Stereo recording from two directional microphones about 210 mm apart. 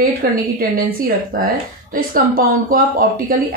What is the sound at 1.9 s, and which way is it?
Speech, 40° right (ahead or behind).